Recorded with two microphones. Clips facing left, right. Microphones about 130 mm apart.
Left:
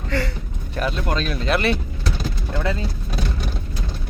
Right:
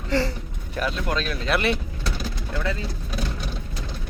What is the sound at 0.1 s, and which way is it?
Speech, 30° right (ahead or behind).